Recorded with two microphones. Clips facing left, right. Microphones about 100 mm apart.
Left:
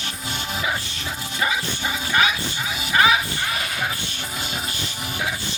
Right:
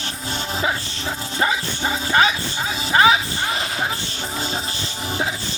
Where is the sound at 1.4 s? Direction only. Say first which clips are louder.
Right 3 dB; 35° right (ahead or behind).